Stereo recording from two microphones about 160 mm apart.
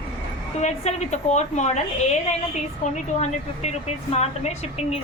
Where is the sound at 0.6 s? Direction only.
45° left (ahead or behind).